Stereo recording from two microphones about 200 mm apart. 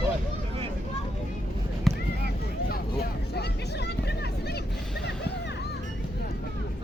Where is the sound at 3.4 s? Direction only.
55° left (ahead or behind).